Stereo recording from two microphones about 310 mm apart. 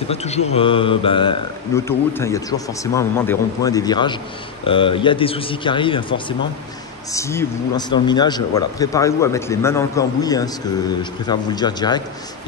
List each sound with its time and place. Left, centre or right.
0.1 s mantra: left
0.5 s a man's voice: centre